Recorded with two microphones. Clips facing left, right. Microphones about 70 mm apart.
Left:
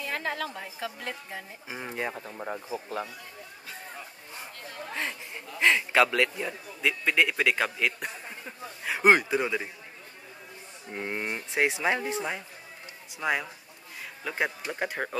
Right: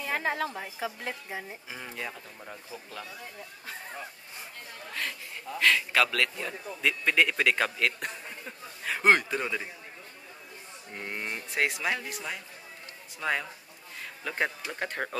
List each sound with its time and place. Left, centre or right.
0.0 s a woman's voice: centre
1.7 s speech: left
5.6 s speech: left
6.8 s a man's voice: centre
10.9 s speech: centre
13.2 s speech: centre